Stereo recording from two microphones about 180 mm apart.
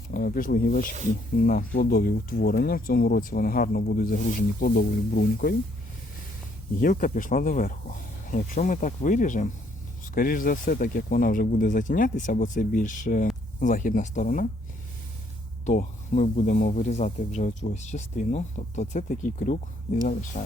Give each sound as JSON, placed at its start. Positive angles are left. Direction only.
{"t": 0.1, "sound": "speech", "side_deg": 55}
{"t": 4.4, "sound": "speech", "side_deg": 65}
{"t": 6.7, "sound": "speech", "side_deg": 50}
{"t": 15.6, "sound": "speech", "side_deg": 45}